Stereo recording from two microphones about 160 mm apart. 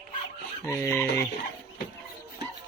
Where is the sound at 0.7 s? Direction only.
15° left (ahead or behind).